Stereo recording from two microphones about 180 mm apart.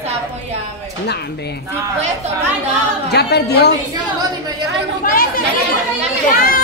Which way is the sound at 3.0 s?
65° left (ahead or behind).